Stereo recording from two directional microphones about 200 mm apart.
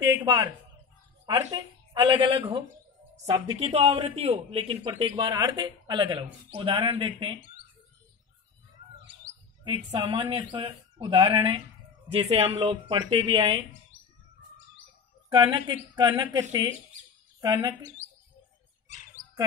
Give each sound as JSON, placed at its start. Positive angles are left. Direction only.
{"t": 0.1, "sound": "a man's voice", "side_deg": -20}
{"t": 1.5, "sound": "a man's voice", "side_deg": -20}
{"t": 3.5, "sound": "a man's voice", "side_deg": -30}
{"t": 9.9, "sound": "a man's voice", "side_deg": -25}
{"t": 15.2, "sound": "a man's voice", "side_deg": -20}